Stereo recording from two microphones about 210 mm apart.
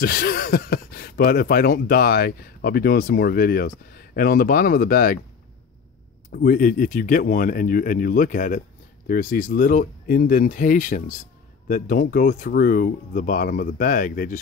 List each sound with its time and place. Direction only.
0.0 s speech: 45° left (ahead or behind)
6.3 s speech: 40° left (ahead or behind)